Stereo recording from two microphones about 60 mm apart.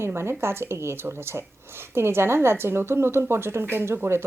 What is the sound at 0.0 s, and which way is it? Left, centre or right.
Speech, right.